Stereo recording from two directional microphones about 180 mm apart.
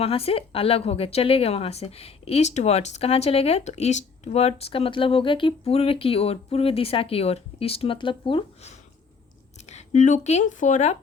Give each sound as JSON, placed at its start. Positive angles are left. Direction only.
{"t": 0.0, "sound": "a woman's voice", "side_deg": 35}
{"t": 9.6, "sound": "speech", "side_deg": 40}